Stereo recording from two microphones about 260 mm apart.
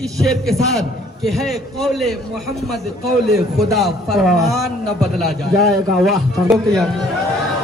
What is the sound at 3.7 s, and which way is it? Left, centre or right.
A man's voice, centre.